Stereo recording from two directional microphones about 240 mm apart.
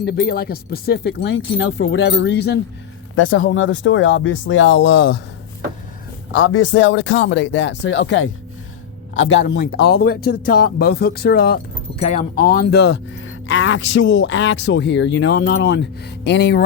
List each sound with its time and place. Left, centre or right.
0.0 s speech: left
3.2 s speech: left
6.3 s speech: left